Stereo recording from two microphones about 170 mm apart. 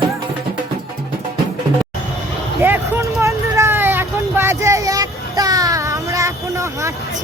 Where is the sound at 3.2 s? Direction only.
15° right (ahead or behind).